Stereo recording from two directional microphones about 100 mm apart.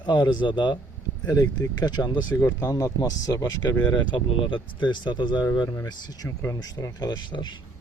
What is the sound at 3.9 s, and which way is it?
Speech, 55° left (ahead or behind).